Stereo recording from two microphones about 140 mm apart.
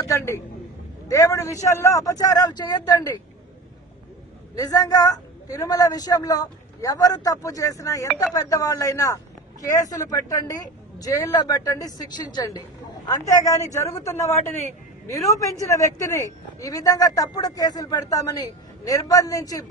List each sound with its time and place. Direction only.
0.0 s a man's voice: 20° left (ahead or behind)
4.6 s speech: 25° left (ahead or behind)